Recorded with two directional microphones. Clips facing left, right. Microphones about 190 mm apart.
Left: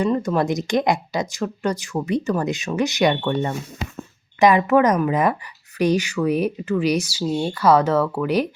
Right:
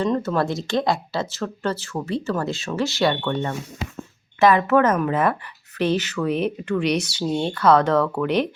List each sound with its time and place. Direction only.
0.0 s speech: 10° left (ahead or behind)